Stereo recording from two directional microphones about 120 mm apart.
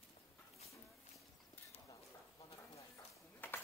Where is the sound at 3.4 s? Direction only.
15° left (ahead or behind).